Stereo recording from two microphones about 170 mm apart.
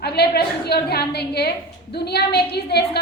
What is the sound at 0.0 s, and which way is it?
A woman's voice, 70° left (ahead or behind).